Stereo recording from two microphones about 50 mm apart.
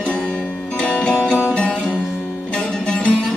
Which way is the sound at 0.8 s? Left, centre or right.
Left.